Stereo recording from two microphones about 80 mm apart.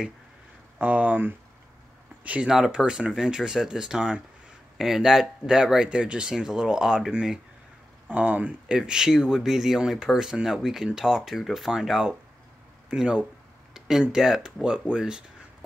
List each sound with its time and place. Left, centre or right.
0.7 s speech: centre